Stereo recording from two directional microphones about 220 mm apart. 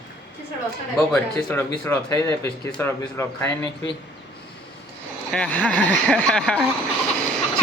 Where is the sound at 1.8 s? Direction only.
10° left (ahead or behind).